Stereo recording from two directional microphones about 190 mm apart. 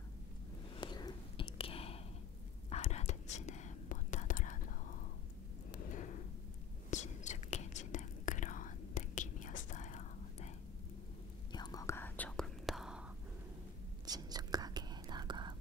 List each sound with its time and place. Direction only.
0.7 s whispering: 20° left (ahead or behind); by 4.9 s 45° left (ahead or behind)
5.7 s a sound: 40° left (ahead or behind)
6.9 s whispering: 40° left (ahead or behind)
11.5 s whispering: 20° left (ahead or behind); by 13.0 s centre (ahead or behind)
14.0 s whispering: 20° right (ahead or behind)